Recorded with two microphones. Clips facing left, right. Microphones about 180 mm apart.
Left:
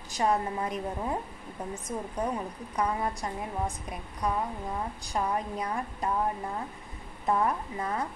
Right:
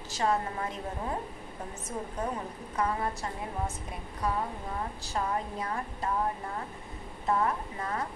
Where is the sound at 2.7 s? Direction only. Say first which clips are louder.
Left 1 dB; 15° left (ahead or behind).